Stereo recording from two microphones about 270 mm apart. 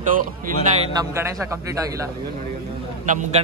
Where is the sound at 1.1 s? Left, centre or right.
Centre.